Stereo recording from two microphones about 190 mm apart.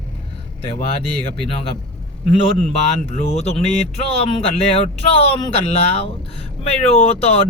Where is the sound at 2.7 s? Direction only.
35° left (ahead or behind).